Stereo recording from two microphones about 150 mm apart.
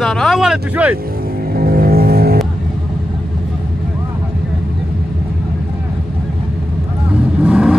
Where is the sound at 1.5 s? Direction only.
85° right.